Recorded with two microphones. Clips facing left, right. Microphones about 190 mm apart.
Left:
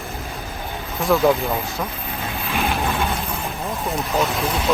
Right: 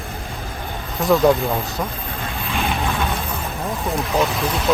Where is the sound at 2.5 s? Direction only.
Centre (ahead or behind).